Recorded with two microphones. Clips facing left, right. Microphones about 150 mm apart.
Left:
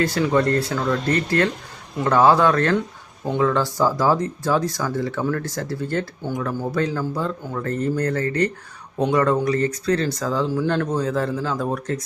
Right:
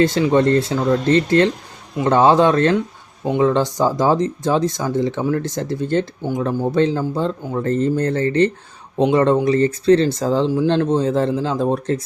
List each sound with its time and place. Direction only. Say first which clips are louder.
0.0 s speech: right 4 dB; 20° right (ahead or behind)